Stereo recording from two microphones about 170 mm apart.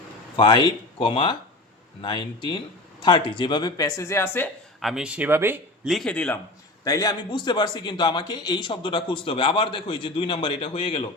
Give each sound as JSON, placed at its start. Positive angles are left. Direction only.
{"t": 0.3, "sound": "a man's voice", "side_deg": 25}
{"t": 4.8, "sound": "speech", "side_deg": 0}
{"t": 5.9, "sound": "a man's voice", "side_deg": 5}
{"t": 6.8, "sound": "a man's voice", "side_deg": 20}